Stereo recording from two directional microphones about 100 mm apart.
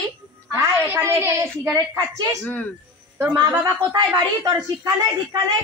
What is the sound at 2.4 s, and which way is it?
Speech, 15° left (ahead or behind).